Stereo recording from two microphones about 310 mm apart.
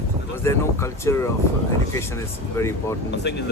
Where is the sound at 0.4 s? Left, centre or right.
Centre.